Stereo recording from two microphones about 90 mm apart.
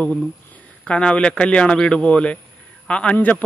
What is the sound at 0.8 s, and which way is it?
Speech, 10° left (ahead or behind).